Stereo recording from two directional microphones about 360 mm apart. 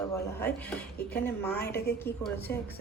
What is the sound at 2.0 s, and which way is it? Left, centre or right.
Speech, centre.